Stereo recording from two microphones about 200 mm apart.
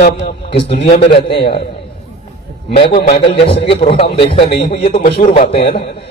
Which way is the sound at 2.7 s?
30° left (ahead or behind).